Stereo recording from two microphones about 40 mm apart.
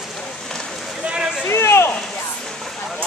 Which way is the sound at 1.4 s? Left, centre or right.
Left.